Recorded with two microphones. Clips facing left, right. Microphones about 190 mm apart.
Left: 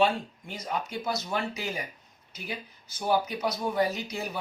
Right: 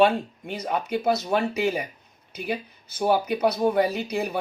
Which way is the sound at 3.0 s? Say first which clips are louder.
Right 6 dB; 60° right (ahead or behind).